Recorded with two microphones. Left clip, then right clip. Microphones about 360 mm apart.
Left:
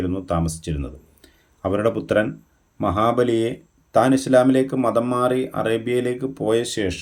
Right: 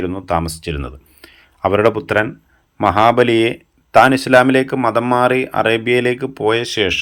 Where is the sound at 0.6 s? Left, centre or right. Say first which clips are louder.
Right 6 dB; right.